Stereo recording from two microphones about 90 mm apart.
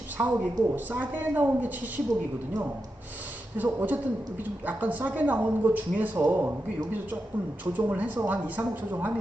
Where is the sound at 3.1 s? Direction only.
20° right (ahead or behind).